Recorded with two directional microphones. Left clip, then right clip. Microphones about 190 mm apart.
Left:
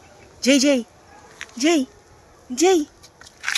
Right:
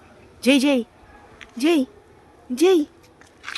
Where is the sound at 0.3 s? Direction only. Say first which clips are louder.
Left 1 dB; 20° right (ahead or behind).